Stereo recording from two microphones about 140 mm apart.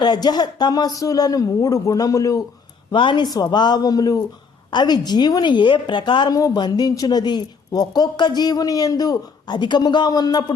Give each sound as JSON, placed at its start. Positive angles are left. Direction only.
{"t": 0.0, "sound": "a woman's voice", "side_deg": 30}
{"t": 2.9, "sound": "a woman's voice", "side_deg": 35}